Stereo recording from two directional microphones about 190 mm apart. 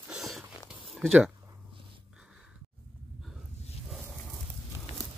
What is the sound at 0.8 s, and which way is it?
Zipper, centre (ahead or behind).